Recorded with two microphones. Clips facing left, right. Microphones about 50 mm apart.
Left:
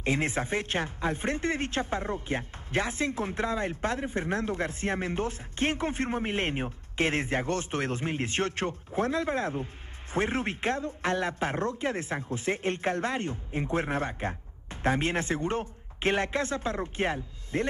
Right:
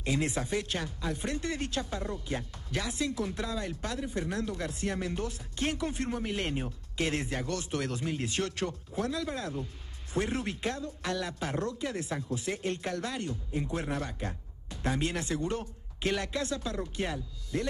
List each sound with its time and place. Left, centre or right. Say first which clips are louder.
0.0 s a woman's voice: left 3 dB; left